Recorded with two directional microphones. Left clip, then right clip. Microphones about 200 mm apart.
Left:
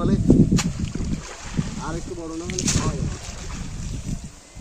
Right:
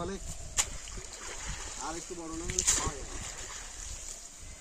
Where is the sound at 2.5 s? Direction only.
Centre (ahead or behind).